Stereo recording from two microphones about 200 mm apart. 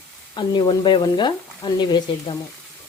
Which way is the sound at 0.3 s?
25° left (ahead or behind).